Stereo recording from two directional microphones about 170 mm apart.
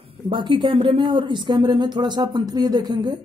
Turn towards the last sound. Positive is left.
turn(degrees=-25)  # may be behind; listen again after turning